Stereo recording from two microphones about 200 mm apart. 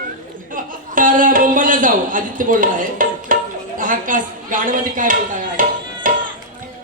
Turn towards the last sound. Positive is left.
turn(degrees=-40)  # may be behind; listen again after turning